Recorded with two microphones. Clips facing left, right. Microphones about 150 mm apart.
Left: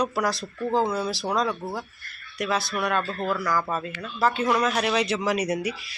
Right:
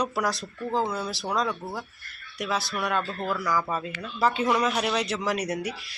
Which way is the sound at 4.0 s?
15° right (ahead or behind).